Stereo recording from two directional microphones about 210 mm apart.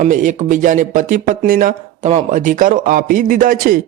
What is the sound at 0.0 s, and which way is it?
Speech, 35° right (ahead or behind).